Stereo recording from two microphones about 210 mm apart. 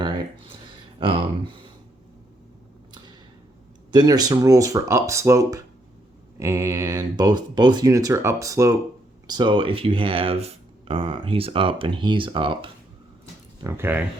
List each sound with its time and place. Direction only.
0.0 s a sound: 25° right (ahead or behind)
3.9 s speech: 20° right (ahead or behind)
13.6 s speech: 10° right (ahead or behind)